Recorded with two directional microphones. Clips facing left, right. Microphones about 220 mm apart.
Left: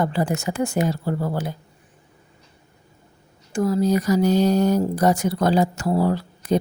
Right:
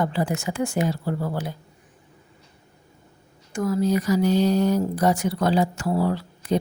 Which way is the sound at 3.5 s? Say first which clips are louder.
Left 2 dB; 35° left (ahead or behind).